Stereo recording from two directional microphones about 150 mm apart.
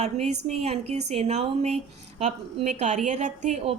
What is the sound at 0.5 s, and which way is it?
Speech, 45° right (ahead or behind).